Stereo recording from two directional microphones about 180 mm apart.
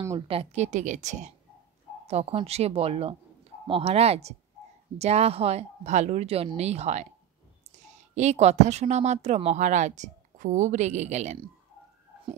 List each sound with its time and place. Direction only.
0.3 s speech: 35° right (ahead or behind)
8.1 s speech: 40° right (ahead or behind)